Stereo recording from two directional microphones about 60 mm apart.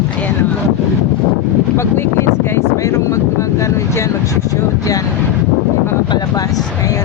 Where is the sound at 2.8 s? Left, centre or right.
Left.